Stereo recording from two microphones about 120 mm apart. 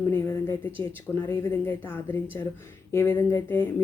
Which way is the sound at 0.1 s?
20° left (ahead or behind).